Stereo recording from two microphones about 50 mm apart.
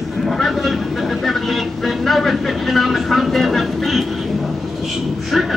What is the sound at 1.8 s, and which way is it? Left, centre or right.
Speech, centre.